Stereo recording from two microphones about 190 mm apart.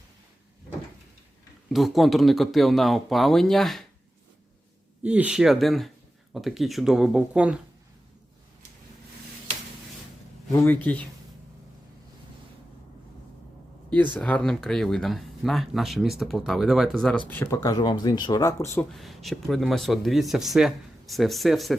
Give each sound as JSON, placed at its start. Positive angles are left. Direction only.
{"t": 1.7, "sound": "speech", "side_deg": 0}
{"t": 5.0, "sound": "speech", "side_deg": -5}
{"t": 10.9, "sound": "speech", "side_deg": 10}
{"t": 13.9, "sound": "speech", "side_deg": 10}
{"t": 18.9, "sound": "speech", "side_deg": 0}